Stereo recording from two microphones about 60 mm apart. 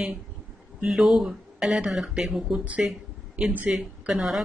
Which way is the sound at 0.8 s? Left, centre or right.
Centre.